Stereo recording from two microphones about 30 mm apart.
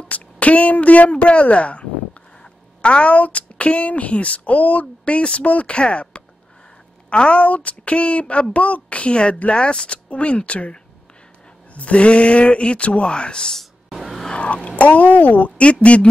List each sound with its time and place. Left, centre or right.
0.1 s a sound: left
1.1 s a woman's voice: left
3.1 s speech: left
5.0 s speech: left
5.7 s speech: left
10.0 s speech: left
11.7 s speech: left
13.1 s speech: left
14.3 s a sound: left
14.8 s speech: left
15.5 s speech: left